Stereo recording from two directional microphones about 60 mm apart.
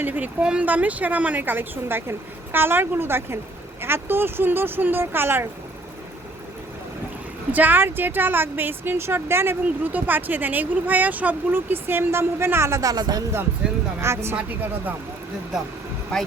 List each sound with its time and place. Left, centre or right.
0.0 s speech: right
7.5 s speech: right
9.9 s speech: right
12.8 s speech: right
14.0 s a woman's voice: right
14.3 s speech: right
16.1 s speech: centre